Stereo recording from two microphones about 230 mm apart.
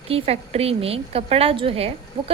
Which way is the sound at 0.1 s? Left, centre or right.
Right.